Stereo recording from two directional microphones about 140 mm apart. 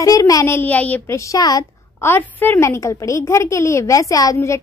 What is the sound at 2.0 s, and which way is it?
A woman's voice, 15° left (ahead or behind).